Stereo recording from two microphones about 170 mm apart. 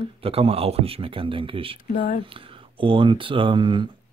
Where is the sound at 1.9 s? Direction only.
50° left (ahead or behind).